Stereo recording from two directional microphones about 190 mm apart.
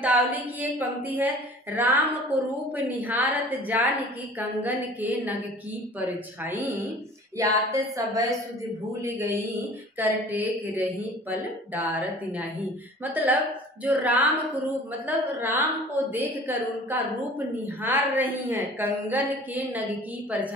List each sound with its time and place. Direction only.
0.0 s a woman's voice: 10° right (ahead or behind)
5.9 s a woman's voice: 10° right (ahead or behind)